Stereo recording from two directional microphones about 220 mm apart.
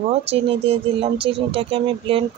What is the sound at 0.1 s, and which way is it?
Speech, 25° right (ahead or behind).